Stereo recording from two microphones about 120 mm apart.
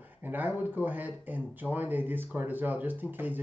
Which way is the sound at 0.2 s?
15° right (ahead or behind).